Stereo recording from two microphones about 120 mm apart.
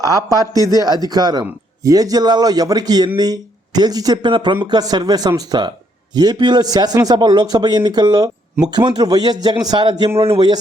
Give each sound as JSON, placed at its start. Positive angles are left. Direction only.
{"t": 0.0, "sound": "a man's voice", "side_deg": -30}
{"t": 10.2, "sound": "speech", "side_deg": -50}